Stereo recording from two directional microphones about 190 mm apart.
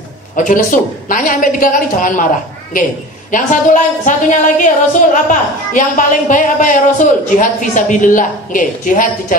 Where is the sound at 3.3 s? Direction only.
40° left (ahead or behind).